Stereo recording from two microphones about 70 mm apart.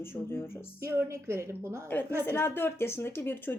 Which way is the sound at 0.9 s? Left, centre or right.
Right.